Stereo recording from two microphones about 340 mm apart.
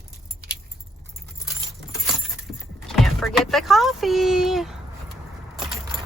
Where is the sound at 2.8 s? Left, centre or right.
Centre.